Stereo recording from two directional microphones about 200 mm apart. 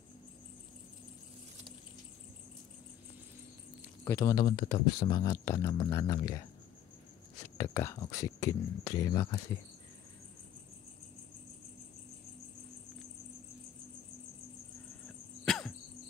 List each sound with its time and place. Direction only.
4.0 s speech: 15° left (ahead or behind)
7.5 s speech: 15° left (ahead or behind)
15.4 s cricket: centre (ahead or behind)